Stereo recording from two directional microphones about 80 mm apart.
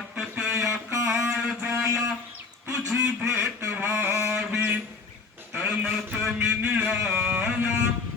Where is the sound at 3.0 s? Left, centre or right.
Centre.